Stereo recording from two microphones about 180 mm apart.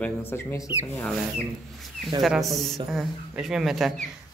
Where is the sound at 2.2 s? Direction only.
Centre (ahead or behind).